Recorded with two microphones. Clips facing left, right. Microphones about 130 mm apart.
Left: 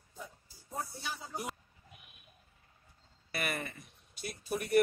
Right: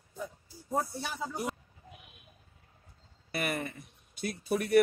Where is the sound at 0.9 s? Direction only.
70° right (ahead or behind).